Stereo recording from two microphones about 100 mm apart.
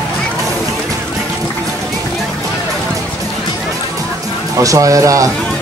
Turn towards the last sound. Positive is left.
turn(degrees=-35)  # may be behind; listen again after turning